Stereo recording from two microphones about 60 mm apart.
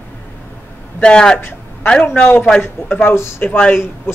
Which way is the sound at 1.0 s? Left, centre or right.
Centre.